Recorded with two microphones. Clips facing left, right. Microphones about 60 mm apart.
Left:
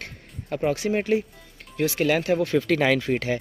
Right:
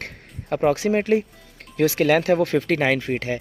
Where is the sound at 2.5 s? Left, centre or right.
Right.